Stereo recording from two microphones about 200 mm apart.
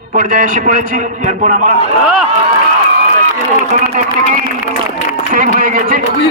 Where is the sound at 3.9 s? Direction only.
40° right (ahead or behind).